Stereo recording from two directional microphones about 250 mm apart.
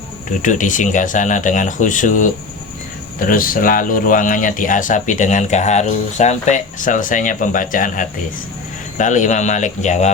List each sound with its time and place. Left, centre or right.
0.3 s a man's voice: left